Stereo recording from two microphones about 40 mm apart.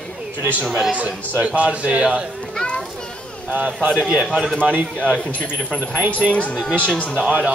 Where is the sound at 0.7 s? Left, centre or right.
Centre.